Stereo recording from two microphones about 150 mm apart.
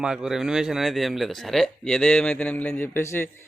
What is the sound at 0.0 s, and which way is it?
A man's voice, 5° right (ahead or behind).